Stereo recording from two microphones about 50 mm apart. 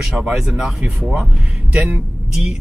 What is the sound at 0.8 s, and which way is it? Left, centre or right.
Speech, centre.